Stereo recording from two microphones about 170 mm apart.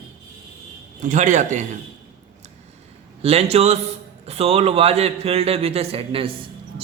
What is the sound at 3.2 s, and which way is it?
A man's voice, 35° right (ahead or behind).